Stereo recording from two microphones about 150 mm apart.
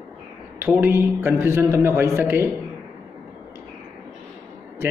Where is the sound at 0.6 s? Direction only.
15° right (ahead or behind).